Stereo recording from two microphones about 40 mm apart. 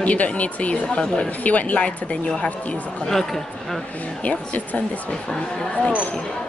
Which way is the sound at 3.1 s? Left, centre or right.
Centre.